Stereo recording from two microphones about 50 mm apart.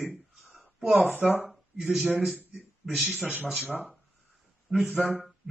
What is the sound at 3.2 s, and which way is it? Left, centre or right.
Speech, right.